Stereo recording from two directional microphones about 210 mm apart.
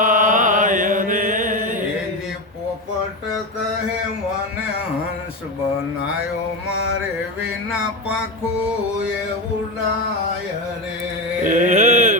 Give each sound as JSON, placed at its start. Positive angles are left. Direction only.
{"t": 0.0, "sound": "chant", "side_deg": -40}
{"t": 7.4, "sound": "music", "side_deg": -5}
{"t": 11.4, "sound": "a sound", "side_deg": -35}